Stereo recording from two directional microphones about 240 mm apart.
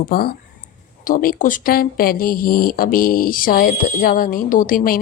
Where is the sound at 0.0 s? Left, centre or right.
Left.